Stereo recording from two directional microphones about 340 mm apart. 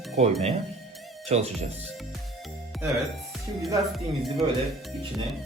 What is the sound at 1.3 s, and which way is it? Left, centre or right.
Speech, centre.